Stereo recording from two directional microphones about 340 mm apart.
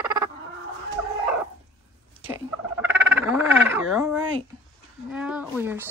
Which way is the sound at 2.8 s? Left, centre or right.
Centre.